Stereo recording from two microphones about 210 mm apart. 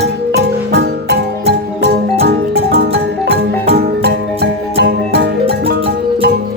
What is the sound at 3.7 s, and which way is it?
Music, 50° right (ahead or behind).